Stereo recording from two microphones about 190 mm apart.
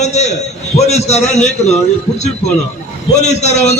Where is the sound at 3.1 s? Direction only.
35° left (ahead or behind).